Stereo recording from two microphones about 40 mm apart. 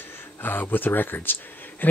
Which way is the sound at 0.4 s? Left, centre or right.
Left.